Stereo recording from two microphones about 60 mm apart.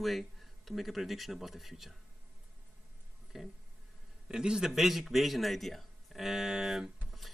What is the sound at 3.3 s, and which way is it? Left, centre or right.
A man's voice, centre.